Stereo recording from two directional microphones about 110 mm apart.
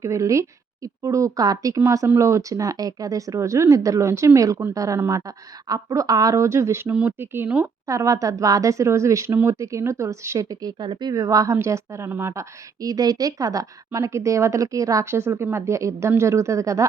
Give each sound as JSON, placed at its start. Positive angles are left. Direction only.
{"t": 0.0, "sound": "a woman's voice", "side_deg": -30}
{"t": 7.9, "sound": "a woman's voice", "side_deg": -30}